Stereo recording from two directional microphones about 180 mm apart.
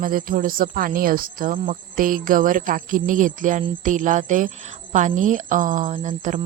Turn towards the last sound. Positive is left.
turn(degrees=-45)  # may be behind; listen again after turning